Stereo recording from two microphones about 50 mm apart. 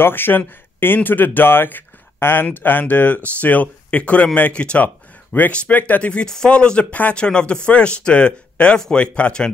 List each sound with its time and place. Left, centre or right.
0.0 s speech: left
4.8 s a sound: left
5.5 s speech: left
6.2 s speech: centre